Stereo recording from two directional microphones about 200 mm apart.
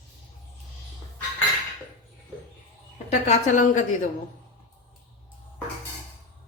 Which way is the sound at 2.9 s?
35° left (ahead or behind).